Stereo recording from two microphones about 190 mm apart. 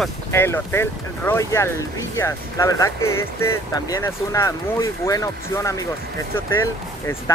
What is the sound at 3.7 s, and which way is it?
Speech, 15° left (ahead or behind).